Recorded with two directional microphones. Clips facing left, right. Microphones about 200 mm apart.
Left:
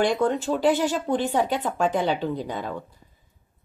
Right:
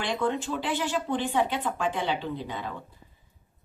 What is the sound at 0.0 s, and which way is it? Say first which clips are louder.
Speech: left 6 dB; 45° left (ahead or behind).